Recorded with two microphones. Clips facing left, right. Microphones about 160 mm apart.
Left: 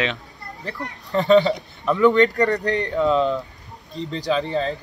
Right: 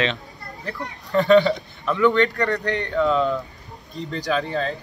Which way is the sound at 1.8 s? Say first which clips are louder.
Left 3 dB; 40° left (ahead or behind).